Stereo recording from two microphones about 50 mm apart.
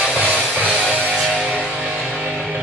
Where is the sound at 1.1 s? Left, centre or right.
Centre.